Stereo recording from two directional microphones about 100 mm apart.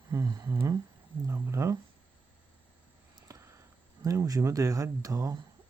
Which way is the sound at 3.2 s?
35° right (ahead or behind).